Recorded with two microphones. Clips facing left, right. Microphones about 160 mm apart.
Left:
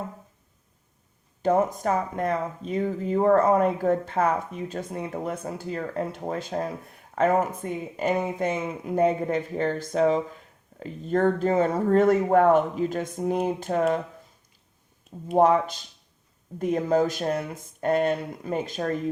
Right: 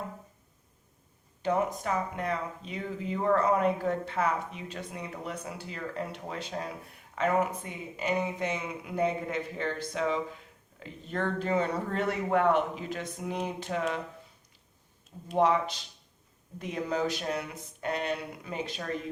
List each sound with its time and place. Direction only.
1.4 s speech: 40° left (ahead or behind)
15.3 s speech: 45° left (ahead or behind)